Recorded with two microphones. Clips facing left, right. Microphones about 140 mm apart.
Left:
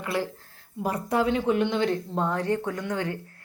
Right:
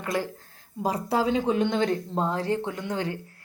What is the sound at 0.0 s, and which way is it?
Speech, 40° right (ahead or behind).